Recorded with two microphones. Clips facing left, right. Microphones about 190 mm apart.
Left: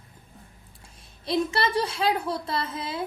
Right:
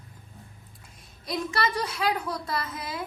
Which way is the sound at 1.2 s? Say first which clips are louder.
Left 4 dB; 30° left (ahead or behind).